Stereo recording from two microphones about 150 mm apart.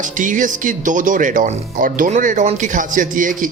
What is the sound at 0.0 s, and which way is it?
Speech, 60° right (ahead or behind).